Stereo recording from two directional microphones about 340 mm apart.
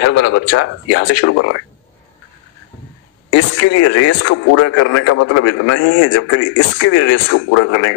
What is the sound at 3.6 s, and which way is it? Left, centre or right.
A man's voice, left.